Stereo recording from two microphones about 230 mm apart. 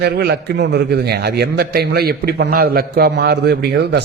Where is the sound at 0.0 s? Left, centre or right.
Right.